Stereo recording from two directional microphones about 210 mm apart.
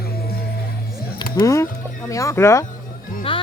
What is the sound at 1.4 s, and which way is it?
Speech, 15° left (ahead or behind).